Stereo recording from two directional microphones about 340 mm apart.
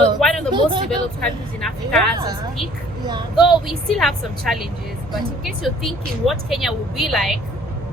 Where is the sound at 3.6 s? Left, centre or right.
Centre.